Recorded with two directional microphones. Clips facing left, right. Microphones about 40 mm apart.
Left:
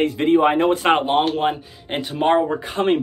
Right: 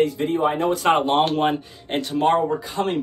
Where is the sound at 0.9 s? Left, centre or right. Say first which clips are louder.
Left 1 dB; centre.